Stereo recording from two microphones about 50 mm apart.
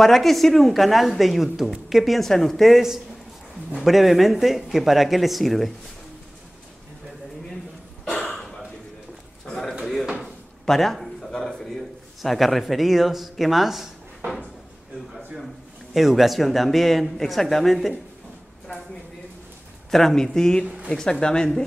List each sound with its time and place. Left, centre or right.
0.0 s a man's voice: centre
10.2 s a sound: centre
15.9 s a man's voice: centre
19.9 s speech: centre
20.6 s speech: centre
20.9 s speech: centre